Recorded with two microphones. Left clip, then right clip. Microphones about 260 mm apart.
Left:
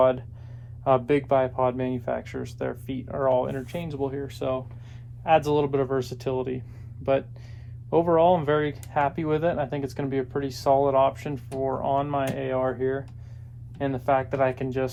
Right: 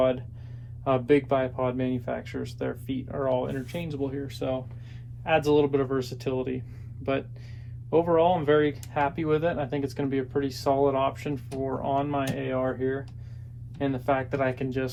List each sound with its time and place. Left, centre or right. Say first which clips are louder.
0.0 s speech: left 4 dB; left